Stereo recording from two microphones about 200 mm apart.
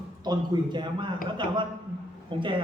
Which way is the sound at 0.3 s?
20° right (ahead or behind).